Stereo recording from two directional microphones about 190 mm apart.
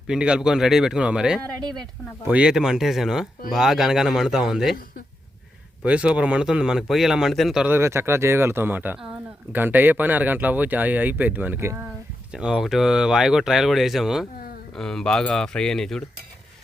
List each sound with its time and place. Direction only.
0.1 s speech: 5° right (ahead or behind)
1.6 s speech: 20° right (ahead or behind)
2.2 s speech: 5° right (ahead or behind)
5.8 s speech: 5° right (ahead or behind)